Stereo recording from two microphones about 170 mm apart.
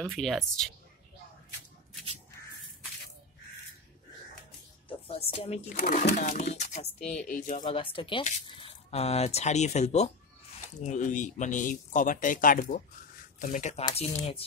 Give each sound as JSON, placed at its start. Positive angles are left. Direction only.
{"t": 0.0, "sound": "speech", "side_deg": 0}
{"t": 4.8, "sound": "music", "side_deg": 35}
{"t": 5.9, "sound": "speech", "side_deg": 45}
{"t": 7.6, "sound": "speech", "side_deg": 30}